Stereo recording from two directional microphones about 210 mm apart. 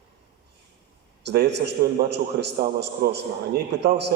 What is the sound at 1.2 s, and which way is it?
A man's voice, 50° right (ahead or behind).